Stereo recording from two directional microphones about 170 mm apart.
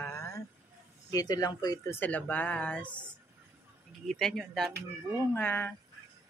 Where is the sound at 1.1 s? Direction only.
20° left (ahead or behind).